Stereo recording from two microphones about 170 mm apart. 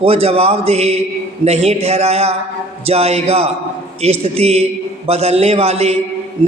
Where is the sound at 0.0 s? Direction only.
35° right (ahead or behind).